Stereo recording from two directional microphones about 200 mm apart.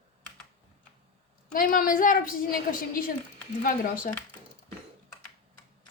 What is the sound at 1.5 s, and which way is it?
A woman's voice, 45° left (ahead or behind).